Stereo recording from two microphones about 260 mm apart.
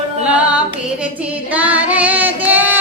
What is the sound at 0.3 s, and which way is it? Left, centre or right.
Music, centre.